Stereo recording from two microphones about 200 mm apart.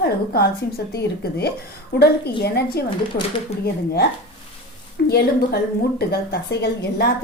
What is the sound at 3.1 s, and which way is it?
Speech, 30° left (ahead or behind).